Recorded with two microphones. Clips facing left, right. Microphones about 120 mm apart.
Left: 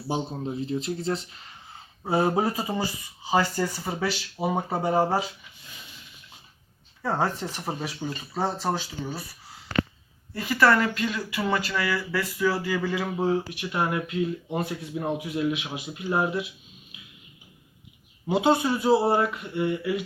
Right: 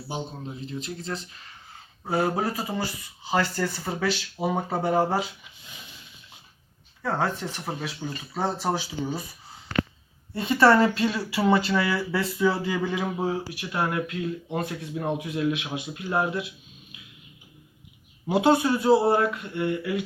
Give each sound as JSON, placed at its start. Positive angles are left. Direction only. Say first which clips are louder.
{"t": 0.4, "sound": "speech", "louder": "left 6 dB", "side_deg": 30}
{"t": 2.0, "sound": "speech", "louder": "left 2 dB", "side_deg": 20}
{"t": 7.0, "sound": "speech", "louder": "even", "side_deg": 10}
{"t": 10.3, "sound": "speech", "louder": "right 3 dB", "side_deg": -25}
{"t": 18.3, "sound": "speech", "louder": "right 1 dB", "side_deg": 0}